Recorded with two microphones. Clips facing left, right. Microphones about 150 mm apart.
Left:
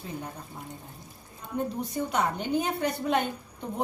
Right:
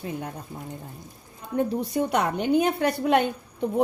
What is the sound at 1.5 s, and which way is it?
A woman's voice, 75° right (ahead or behind).